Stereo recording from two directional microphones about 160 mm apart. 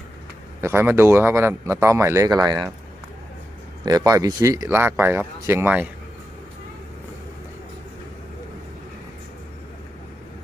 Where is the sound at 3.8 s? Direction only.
20° right (ahead or behind).